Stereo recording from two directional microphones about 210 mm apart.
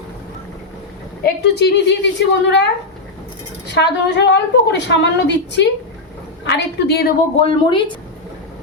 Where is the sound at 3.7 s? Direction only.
55° left (ahead or behind).